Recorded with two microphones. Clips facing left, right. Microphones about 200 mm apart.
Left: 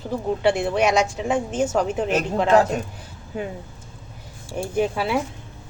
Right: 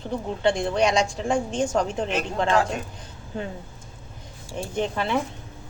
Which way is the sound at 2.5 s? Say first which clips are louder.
Left 6 dB; 40° left (ahead or behind).